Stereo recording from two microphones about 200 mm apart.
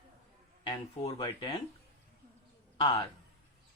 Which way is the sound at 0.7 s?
20° left (ahead or behind).